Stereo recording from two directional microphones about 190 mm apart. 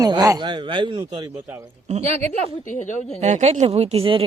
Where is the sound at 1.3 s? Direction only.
10° right (ahead or behind).